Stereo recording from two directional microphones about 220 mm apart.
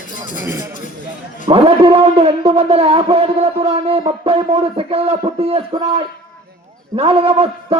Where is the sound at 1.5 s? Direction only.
25° right (ahead or behind).